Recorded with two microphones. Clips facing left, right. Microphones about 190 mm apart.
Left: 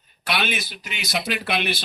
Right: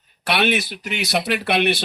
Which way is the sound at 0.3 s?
65° right (ahead or behind).